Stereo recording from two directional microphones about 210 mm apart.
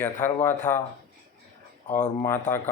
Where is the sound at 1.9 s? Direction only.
35° left (ahead or behind).